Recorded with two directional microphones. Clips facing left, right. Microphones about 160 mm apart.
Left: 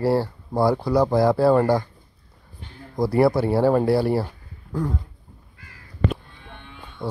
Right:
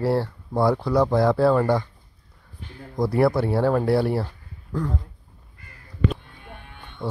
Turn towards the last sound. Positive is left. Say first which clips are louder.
# even
turn(degrees=0)  # may be behind; listen again after turning